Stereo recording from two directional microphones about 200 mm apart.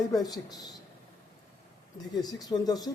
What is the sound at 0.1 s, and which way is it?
Speech, 20° left (ahead or behind).